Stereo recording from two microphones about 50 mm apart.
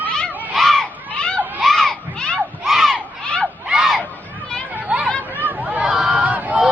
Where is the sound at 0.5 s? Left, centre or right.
Centre.